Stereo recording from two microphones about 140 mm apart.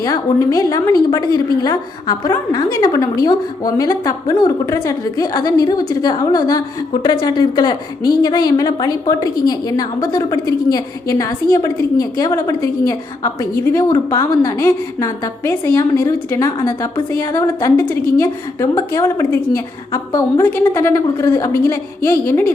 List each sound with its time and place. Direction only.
0.0 s a woman's voice: 25° left (ahead or behind)